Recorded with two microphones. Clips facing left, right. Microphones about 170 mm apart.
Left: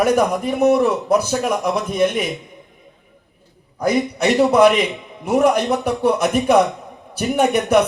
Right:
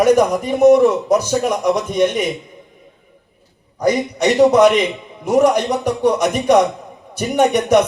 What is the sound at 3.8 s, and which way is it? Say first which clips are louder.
A man's voice: right 1 dB; 5° left (ahead or behind).